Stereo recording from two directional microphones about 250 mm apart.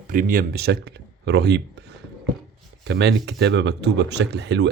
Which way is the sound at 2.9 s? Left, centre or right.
Right.